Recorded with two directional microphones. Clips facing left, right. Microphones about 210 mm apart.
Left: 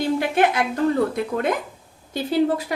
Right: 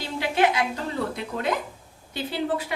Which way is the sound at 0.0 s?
50° left (ahead or behind).